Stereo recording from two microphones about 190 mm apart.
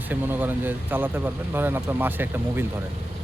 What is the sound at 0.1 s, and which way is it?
Speech, 10° right (ahead or behind).